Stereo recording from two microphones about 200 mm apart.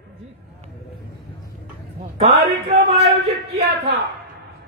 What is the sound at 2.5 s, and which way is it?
Speech, 25° right (ahead or behind).